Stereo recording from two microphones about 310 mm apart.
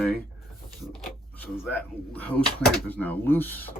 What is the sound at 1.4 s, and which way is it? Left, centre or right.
Speech, centre.